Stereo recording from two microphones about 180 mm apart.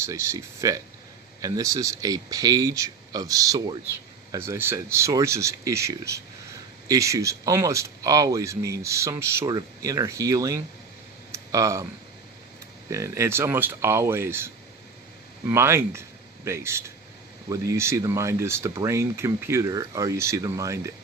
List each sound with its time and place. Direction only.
0.0 s speech: 15° right (ahead or behind)
11.3 s a sound: 15° right (ahead or behind)
12.9 s speech: 15° right (ahead or behind)